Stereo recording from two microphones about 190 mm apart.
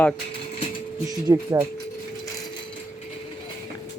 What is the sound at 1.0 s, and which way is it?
Speech, 15° right (ahead or behind).